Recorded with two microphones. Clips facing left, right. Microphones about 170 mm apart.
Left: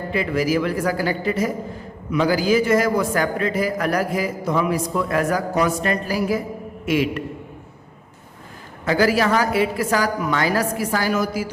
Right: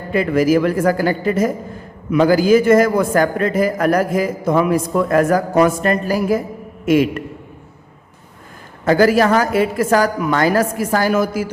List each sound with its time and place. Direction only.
0.1 s a man's voice: 50° right (ahead or behind)
8.8 s a man's voice: 45° right (ahead or behind)